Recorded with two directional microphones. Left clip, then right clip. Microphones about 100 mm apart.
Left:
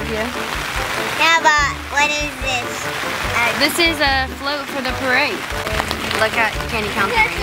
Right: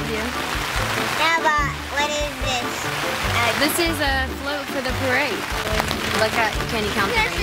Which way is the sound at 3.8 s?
20° left (ahead or behind).